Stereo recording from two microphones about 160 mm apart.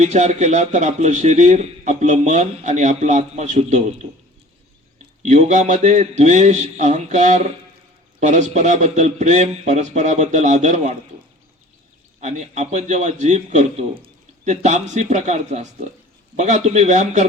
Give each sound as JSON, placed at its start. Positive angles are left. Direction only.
{"t": 0.0, "sound": "a man's voice", "side_deg": -45}
{"t": 5.2, "sound": "a man's voice", "side_deg": -50}
{"t": 12.2, "sound": "a man's voice", "side_deg": -45}